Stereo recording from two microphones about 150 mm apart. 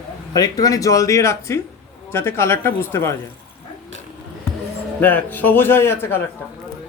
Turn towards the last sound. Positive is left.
turn(degrees=15)  # may be behind; listen again after turning